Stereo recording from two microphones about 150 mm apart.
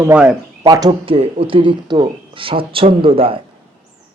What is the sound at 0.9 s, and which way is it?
Speech, 40° right (ahead or behind).